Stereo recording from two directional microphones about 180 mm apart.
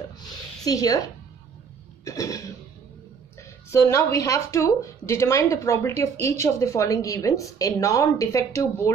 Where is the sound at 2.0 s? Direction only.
20° left (ahead or behind).